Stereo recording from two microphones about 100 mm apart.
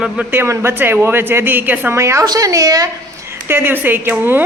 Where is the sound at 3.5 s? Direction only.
20° right (ahead or behind).